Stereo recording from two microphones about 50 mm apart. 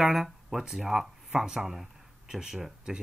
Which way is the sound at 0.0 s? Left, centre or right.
Centre.